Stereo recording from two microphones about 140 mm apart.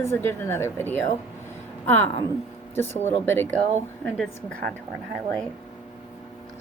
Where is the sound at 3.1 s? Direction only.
15° left (ahead or behind).